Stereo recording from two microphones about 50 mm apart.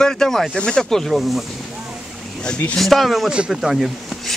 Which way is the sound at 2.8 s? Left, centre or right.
Centre.